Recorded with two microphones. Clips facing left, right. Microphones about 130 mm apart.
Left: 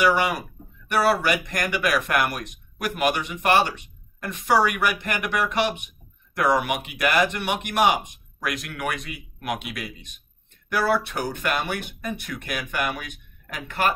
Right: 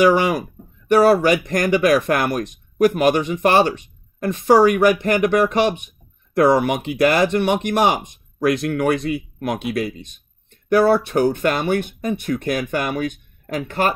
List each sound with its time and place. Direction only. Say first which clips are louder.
0.9 s speech: right 8 dB; 35° right (ahead or behind)